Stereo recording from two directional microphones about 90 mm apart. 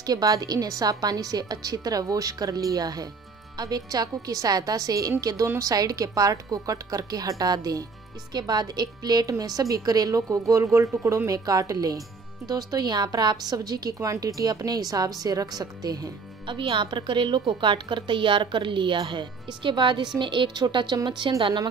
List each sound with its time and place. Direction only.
0.0 s a woman's voice: 40° right (ahead or behind)
13.9 s a woman's voice: 35° right (ahead or behind)
16.4 s speech: 70° right (ahead or behind); by 21.3 s 55° right (ahead or behind)